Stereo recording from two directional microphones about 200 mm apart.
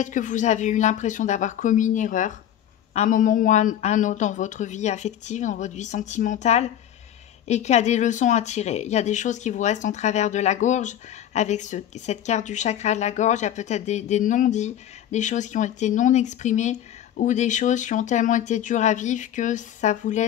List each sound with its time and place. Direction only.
0.0 s speech: 40° left (ahead or behind)